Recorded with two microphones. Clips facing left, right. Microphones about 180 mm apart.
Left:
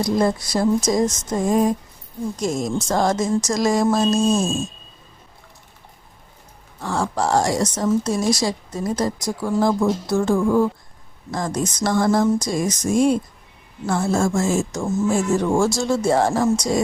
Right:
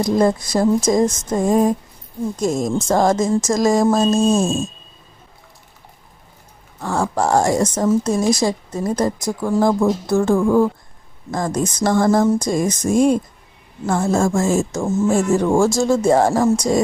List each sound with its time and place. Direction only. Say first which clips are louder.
0.0 s speech: right 3 dB; 50° right (ahead or behind)
6.8 s speech: right 3 dB; 50° right (ahead or behind)